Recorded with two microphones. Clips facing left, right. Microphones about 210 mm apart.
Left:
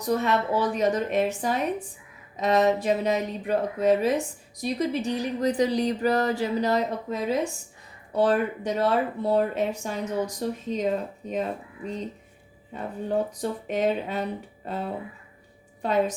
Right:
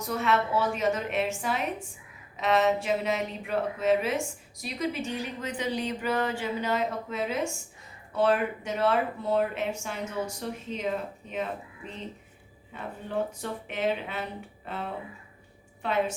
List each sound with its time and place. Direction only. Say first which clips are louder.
0.0 s speech: left 3 dB; 35° left (ahead or behind)
15.8 s speech: left 4 dB; 40° left (ahead or behind)